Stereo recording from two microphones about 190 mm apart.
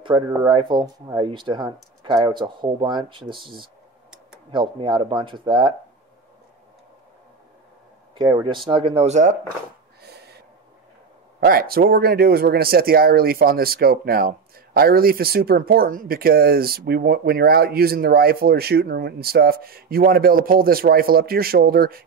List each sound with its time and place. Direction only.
0.4 s speech: 25° right (ahead or behind)
8.2 s speech: 25° right (ahead or behind); by 9.4 s 40° right (ahead or behind)
10.0 s snort: 60° right (ahead or behind)
11.4 s speech: 50° right (ahead or behind)